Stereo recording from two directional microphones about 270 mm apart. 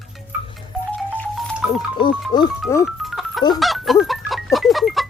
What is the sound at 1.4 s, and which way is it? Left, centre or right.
Music, centre.